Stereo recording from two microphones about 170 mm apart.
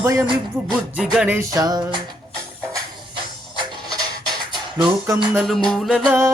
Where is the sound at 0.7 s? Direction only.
Centre (ahead or behind).